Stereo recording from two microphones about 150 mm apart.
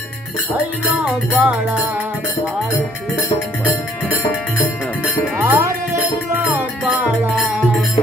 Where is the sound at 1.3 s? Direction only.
5° right (ahead or behind).